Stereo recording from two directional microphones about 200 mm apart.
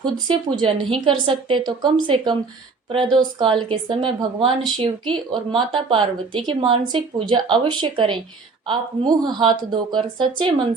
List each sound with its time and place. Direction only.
0.3 s speech: 25° right (ahead or behind)